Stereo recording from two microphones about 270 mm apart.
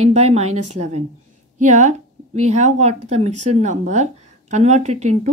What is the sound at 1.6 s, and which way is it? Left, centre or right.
A woman's voice, right.